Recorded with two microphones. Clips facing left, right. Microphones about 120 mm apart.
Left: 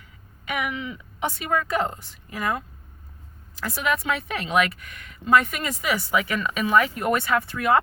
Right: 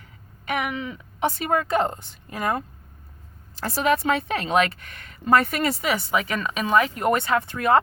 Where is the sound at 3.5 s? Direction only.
30° right (ahead or behind).